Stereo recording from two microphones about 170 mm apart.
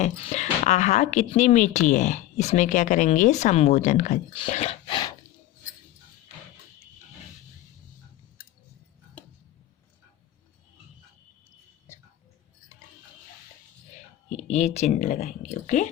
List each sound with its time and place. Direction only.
0.0 s speech: 40° left (ahead or behind)
14.5 s speech: 40° left (ahead or behind)